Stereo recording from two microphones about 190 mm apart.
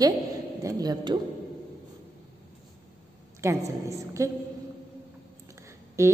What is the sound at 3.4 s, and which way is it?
Speech, 15° right (ahead or behind).